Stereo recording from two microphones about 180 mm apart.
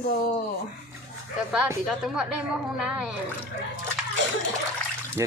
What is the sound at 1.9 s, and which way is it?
A woman's voice, centre (ahead or behind).